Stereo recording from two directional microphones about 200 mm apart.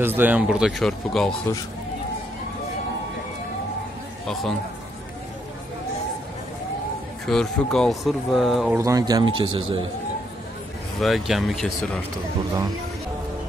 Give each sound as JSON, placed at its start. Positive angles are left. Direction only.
{"t": 0.0, "sound": "speech", "side_deg": -10}
{"t": 4.3, "sound": "speech", "side_deg": 0}
{"t": 7.2, "sound": "speech", "side_deg": 5}
{"t": 8.7, "sound": "speech", "side_deg": -15}
{"t": 11.0, "sound": "speech", "side_deg": 0}